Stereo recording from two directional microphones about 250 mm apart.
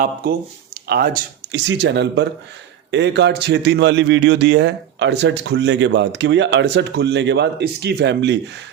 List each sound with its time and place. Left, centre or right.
0.9 s a man's voice: right